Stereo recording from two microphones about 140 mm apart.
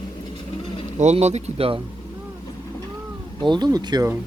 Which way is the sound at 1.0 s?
55° right (ahead or behind).